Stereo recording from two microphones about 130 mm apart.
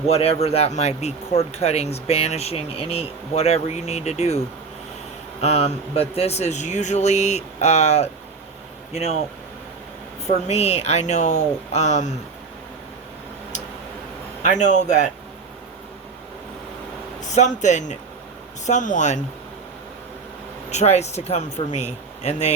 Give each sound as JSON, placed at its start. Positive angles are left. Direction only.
{"t": 0.1, "sound": "speech", "side_deg": 55}
{"t": 5.4, "sound": "speech", "side_deg": 55}
{"t": 10.2, "sound": "speech", "side_deg": 60}
{"t": 14.4, "sound": "a man's voice", "side_deg": 65}
{"t": 17.3, "sound": "a man's voice", "side_deg": 65}
{"t": 20.7, "sound": "speech", "side_deg": 60}